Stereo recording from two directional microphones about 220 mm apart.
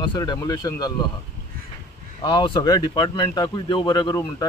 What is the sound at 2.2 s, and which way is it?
Speech, 20° left (ahead or behind).